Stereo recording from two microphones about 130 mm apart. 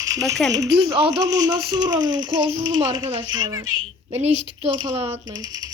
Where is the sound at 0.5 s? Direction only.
30° right (ahead or behind).